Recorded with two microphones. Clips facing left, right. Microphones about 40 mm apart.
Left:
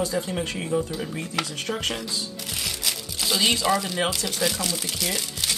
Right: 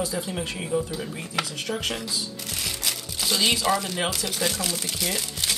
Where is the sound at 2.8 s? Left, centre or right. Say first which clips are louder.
Left 1 dB; centre.